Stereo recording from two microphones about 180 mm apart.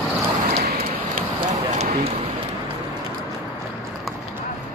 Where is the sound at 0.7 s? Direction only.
45° right (ahead or behind).